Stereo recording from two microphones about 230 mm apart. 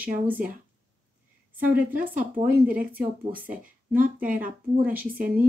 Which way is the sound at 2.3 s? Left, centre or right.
Right.